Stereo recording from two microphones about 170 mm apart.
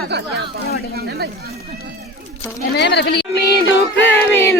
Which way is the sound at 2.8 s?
85° left.